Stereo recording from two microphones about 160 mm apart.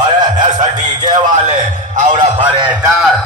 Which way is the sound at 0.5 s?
50° right (ahead or behind).